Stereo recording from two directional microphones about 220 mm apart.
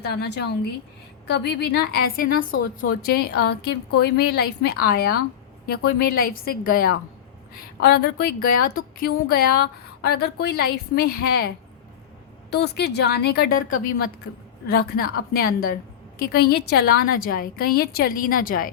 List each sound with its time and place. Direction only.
0.0 s a woman's voice: 50° left (ahead or behind)